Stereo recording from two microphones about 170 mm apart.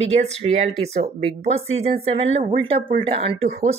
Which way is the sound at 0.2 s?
40° right (ahead or behind).